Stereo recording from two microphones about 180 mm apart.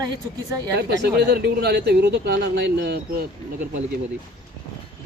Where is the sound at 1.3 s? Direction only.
65° right (ahead or behind).